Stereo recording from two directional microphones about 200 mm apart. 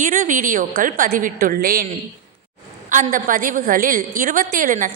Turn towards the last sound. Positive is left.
turn(degrees=-40)  # may be behind; listen again after turning